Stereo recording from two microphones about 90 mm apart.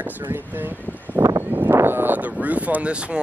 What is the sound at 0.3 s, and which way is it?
Speech, 20° right (ahead or behind).